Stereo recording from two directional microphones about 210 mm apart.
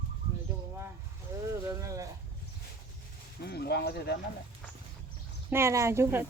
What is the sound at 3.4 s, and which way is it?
Speech, 50° left (ahead or behind).